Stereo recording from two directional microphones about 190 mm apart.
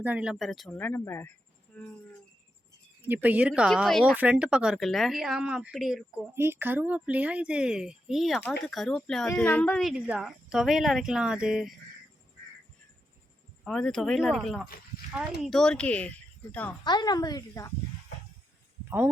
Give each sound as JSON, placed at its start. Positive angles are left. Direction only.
{"t": 0.0, "sound": "speech", "side_deg": -5}
{"t": 3.0, "sound": "speech", "side_deg": -10}
{"t": 6.3, "sound": "speech", "side_deg": -15}
{"t": 13.7, "sound": "speech", "side_deg": 5}
{"t": 16.8, "sound": "speech", "side_deg": 20}
{"t": 18.9, "sound": "speech", "side_deg": -10}